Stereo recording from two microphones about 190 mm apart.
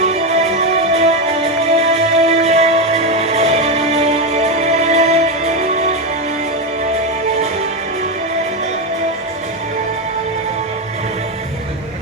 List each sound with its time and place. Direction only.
0.9 s music: 30° right (ahead or behind)